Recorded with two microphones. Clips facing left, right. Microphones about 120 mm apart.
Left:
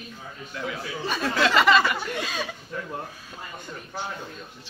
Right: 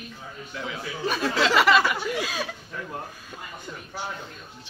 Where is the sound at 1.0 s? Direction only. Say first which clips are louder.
Right 1 dB; centre (ahead or behind).